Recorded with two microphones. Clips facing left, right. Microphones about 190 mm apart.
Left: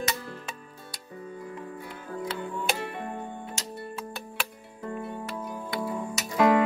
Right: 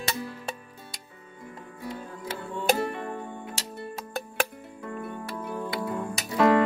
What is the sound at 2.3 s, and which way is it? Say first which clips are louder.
Music: right 8 dB; 40° right (ahead or behind).